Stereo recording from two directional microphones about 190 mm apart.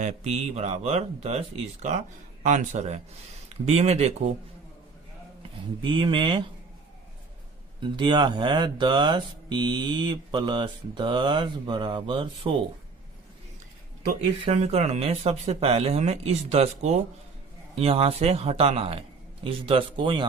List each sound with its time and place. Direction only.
0.0 s speech: 35° right (ahead or behind)
5.4 s speech: 25° right (ahead or behind)
7.8 s speech: 25° right (ahead or behind)
14.4 s speech: 35° right (ahead or behind)